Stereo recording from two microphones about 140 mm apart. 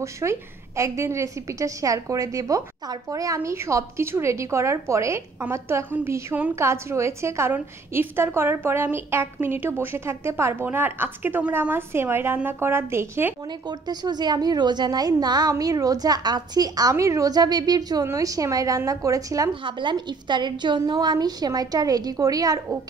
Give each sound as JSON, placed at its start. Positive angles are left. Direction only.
{"t": 0.0, "sound": "a woman's voice", "side_deg": -20}
{"t": 13.5, "sound": "a woman's voice", "side_deg": -30}
{"t": 19.6, "sound": "a woman's voice", "side_deg": -35}